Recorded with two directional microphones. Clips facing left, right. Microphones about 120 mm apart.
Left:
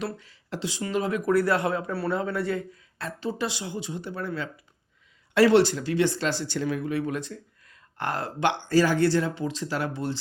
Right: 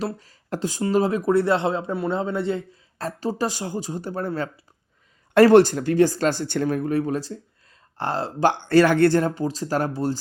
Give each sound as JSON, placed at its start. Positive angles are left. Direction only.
{"t": 0.0, "sound": "speech", "side_deg": -40}
{"t": 3.0, "sound": "speech", "side_deg": -40}
{"t": 8.6, "sound": "speech", "side_deg": -65}